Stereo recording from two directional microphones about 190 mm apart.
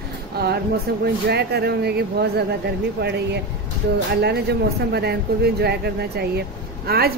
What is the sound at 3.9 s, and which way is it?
Speech, 60° right (ahead or behind).